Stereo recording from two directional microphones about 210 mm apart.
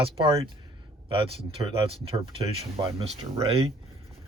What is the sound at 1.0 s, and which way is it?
Speech, 25° right (ahead or behind).